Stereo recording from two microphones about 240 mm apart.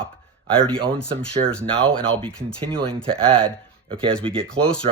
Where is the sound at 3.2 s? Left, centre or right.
Right.